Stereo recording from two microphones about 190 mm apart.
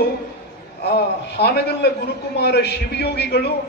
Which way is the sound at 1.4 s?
60° left (ahead or behind).